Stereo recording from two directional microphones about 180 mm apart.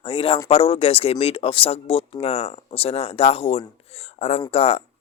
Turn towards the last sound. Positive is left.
turn(degrees=35)  # may be behind; listen again after turning